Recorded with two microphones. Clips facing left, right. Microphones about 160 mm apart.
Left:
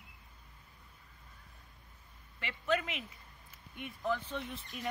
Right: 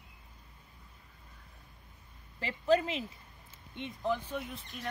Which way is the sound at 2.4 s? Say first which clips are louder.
Right 6 dB; 35° right (ahead or behind).